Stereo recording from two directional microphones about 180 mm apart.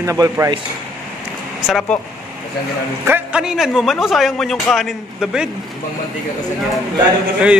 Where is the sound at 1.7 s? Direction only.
Centre (ahead or behind).